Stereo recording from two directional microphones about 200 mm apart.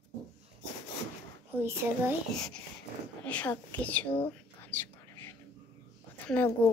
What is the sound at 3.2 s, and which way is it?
Speech, 5° left (ahead or behind).